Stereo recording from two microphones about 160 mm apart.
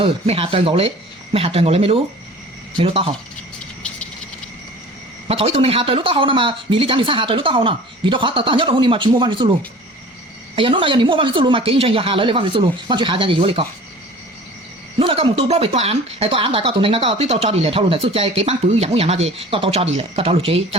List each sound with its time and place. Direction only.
0.0 s speech: 35° right (ahead or behind)
3.8 s frog: 10° left (ahead or behind)
5.3 s speech: 40° right (ahead or behind)
14.9 s speech: 35° right (ahead or behind)